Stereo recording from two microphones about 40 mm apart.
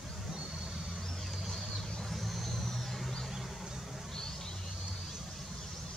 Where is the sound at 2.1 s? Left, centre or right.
Centre.